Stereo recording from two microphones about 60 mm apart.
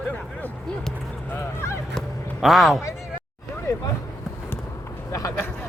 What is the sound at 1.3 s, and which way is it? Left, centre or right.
Speech, left.